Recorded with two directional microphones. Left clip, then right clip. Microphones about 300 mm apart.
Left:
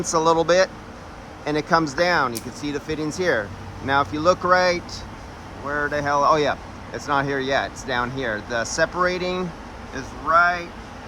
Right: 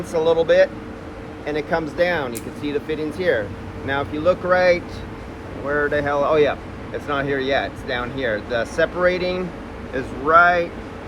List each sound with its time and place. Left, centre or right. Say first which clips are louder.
0.0 s speech: even; left